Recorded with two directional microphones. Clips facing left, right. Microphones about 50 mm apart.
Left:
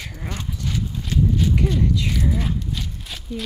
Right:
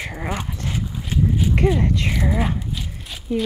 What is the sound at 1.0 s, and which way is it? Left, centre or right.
Horse, centre.